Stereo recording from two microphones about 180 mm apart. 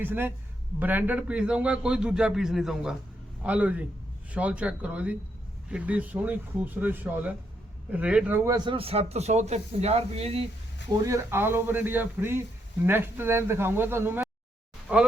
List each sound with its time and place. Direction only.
0.0 s a man's voice: 10° right (ahead or behind)
8.4 s speech: 25° right (ahead or behind)
11.0 s speech: 15° right (ahead or behind)